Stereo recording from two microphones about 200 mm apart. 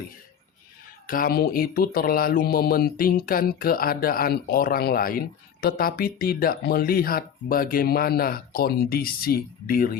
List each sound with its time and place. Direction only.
1.0 s mantra: 45° left (ahead or behind)